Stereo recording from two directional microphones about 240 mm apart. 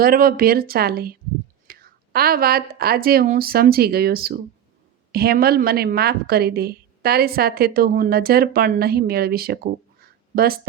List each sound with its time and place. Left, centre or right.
0.0 s a woman's voice: right